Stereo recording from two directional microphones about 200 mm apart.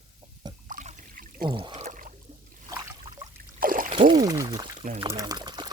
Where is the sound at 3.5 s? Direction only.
45° right (ahead or behind).